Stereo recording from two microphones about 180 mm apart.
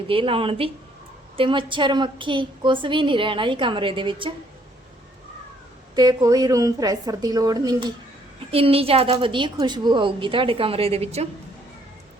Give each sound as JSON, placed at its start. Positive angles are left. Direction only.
{"t": 0.1, "sound": "a woman's voice", "side_deg": -30}
{"t": 6.0, "sound": "a woman's voice", "side_deg": -20}